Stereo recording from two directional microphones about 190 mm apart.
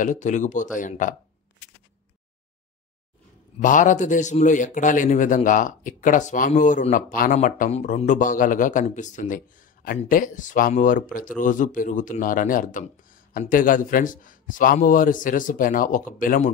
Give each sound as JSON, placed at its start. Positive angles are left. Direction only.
{"t": 0.0, "sound": "a man's voice", "side_deg": 40}
{"t": 3.6, "sound": "a man's voice", "side_deg": 40}